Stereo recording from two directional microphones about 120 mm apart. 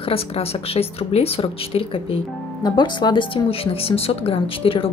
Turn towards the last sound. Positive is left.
turn(degrees=50)  # may be behind; listen again after turning